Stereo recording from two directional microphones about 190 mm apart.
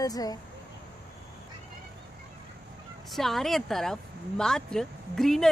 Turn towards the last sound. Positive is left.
turn(degrees=0)  # may be behind; listen again after turning